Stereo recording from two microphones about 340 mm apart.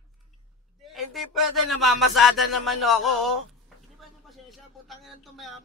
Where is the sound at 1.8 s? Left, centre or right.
Centre.